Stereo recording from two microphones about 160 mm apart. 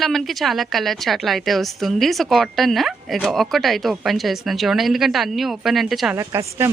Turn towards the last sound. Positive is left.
turn(degrees=-15)  # may be behind; listen again after turning